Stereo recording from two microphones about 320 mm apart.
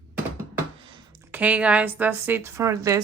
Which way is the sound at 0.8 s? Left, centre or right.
Centre.